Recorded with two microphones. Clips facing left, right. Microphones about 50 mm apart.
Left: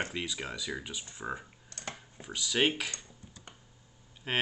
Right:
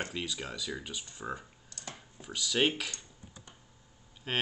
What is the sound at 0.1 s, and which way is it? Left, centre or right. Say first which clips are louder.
Speech: left 1 dB; centre.